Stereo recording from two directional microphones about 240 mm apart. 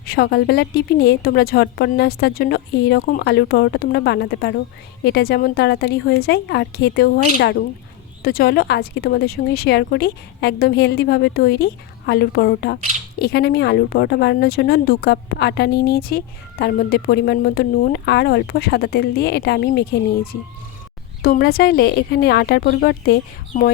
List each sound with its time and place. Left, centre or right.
0.0 s a woman's voice: left
21.2 s a woman's voice: left